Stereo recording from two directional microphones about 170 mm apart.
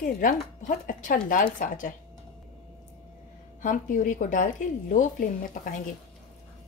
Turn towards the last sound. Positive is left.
turn(degrees=50)  # may be behind; listen again after turning